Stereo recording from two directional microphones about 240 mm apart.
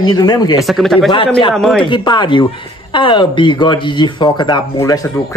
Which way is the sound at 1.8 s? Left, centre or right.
Centre.